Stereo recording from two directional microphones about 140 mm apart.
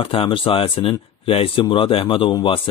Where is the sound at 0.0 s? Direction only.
40° left (ahead or behind).